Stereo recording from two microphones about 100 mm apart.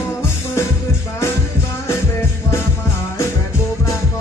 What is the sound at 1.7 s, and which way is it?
Music, 30° left (ahead or behind).